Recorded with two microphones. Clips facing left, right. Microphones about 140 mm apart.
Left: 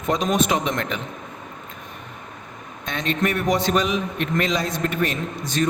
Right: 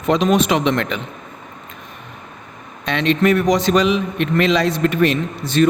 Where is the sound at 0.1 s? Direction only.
75° right (ahead or behind).